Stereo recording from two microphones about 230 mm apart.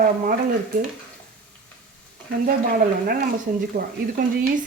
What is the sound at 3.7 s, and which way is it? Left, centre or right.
Stir, right.